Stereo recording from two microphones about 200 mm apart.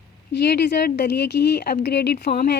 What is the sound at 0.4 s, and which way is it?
Speech, 55° left (ahead or behind).